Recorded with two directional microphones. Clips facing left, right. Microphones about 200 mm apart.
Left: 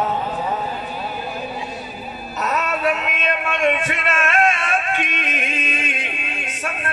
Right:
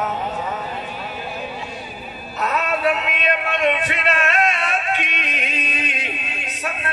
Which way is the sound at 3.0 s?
45° left (ahead or behind).